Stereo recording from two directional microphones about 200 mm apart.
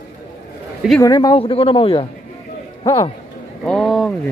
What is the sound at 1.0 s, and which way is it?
Speech, 20° left (ahead or behind).